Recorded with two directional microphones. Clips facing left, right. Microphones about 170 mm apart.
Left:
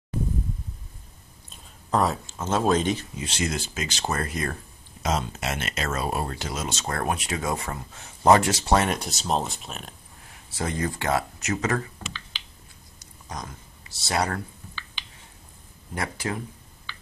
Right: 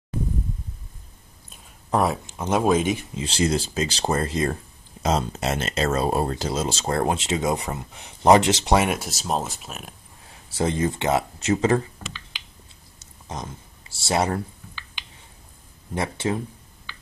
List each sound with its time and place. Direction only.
1.5 s speech: 10° right (ahead or behind)
3.2 s speech: 30° right (ahead or behind)
8.7 s speech: 5° right (ahead or behind)
10.5 s speech: 25° right (ahead or behind)
13.0 s a sound: 25° right (ahead or behind)
15.9 s speech: 25° right (ahead or behind)